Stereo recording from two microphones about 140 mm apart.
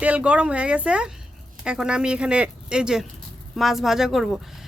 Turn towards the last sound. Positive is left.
turn(degrees=0)  # may be behind; listen again after turning